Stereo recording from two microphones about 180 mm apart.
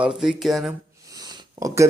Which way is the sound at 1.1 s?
20° right (ahead or behind).